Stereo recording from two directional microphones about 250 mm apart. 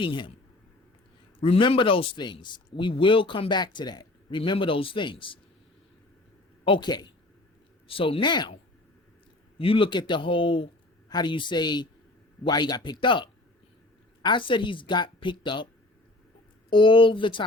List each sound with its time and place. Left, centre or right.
0.0 s speech: centre
1.4 s speech: left
6.7 s speech: centre
9.6 s speech: left